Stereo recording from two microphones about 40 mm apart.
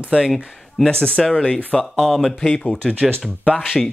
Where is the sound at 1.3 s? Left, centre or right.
Left.